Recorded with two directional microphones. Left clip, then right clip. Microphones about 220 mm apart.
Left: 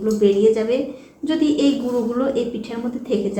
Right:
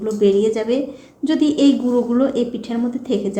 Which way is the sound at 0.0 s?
40° right (ahead or behind).